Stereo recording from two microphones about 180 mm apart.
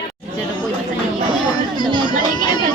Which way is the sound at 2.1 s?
25° left (ahead or behind).